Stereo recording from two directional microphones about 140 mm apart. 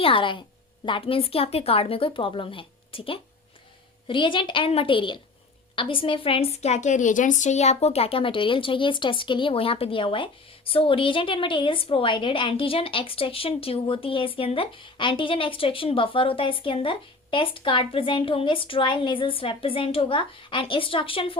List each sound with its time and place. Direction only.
0.0 s a woman's voice: 40° left (ahead or behind)